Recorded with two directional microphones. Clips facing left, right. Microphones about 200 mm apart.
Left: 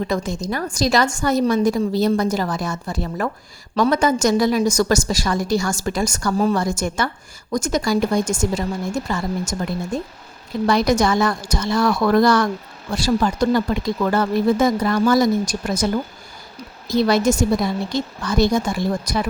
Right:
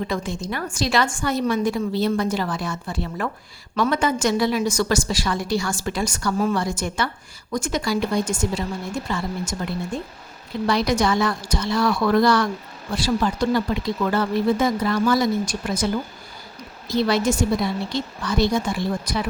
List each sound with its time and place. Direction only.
0.1 s a woman's voice: 40° left (ahead or behind)
16.9 s a woman's voice: 45° left (ahead or behind)